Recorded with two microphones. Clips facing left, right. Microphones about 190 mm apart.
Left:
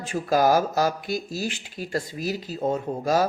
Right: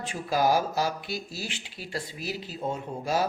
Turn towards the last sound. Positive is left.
turn(degrees=40)  # may be behind; listen again after turning